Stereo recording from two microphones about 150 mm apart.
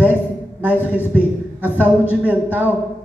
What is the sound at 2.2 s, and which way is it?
Speech, 10° right (ahead or behind).